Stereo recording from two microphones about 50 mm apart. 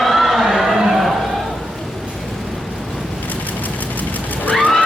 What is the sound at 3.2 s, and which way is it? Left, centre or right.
Vehicle, left.